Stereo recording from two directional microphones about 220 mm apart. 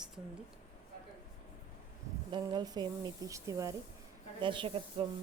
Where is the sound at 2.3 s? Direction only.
20° right (ahead or behind).